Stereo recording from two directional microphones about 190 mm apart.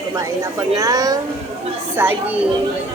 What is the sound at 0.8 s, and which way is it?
Speech, 20° right (ahead or behind).